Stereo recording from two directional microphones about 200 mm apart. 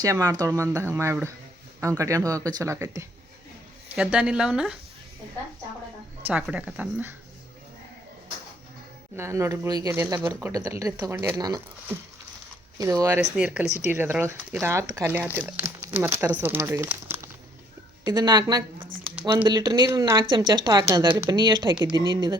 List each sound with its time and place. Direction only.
0.0 s speech: 15° right (ahead or behind)
3.9 s speech: 5° right (ahead or behind)
6.2 s speech: 5° right (ahead or behind)
9.1 s speech: 15° right (ahead or behind)